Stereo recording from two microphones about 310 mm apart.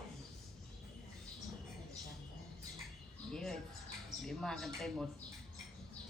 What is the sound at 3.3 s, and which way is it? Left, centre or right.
Speech, centre.